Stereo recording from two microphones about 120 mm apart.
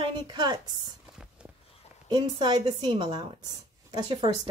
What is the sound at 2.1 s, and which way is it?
A woman's voice, 40° right (ahead or behind).